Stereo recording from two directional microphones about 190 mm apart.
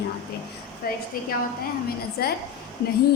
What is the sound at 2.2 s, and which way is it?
Speech, 55° left (ahead or behind).